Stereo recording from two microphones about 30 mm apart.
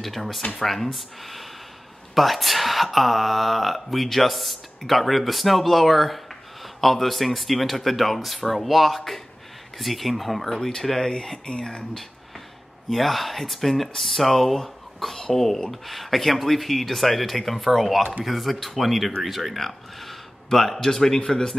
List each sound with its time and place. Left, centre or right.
0.0 s speech: centre
2.1 s speech: centre
12.9 s a man's voice: centre